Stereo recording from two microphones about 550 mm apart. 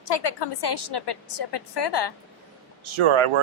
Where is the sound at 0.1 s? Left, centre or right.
Left.